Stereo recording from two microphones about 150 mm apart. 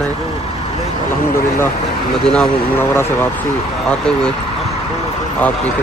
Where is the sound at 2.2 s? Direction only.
10° left (ahead or behind).